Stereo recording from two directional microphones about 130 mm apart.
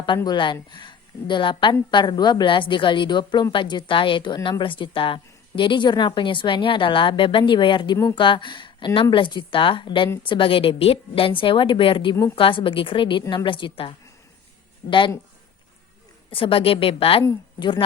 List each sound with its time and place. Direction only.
0.3 s a woman's voice: 35° left (ahead or behind)
16.3 s a woman's voice: 45° left (ahead or behind)